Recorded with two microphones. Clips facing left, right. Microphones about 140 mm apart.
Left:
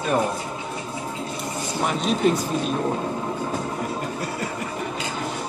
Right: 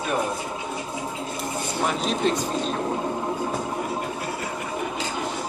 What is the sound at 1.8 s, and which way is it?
Speech, centre (ahead or behind).